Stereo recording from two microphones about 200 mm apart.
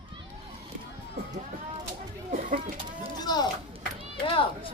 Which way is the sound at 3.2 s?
20° left (ahead or behind).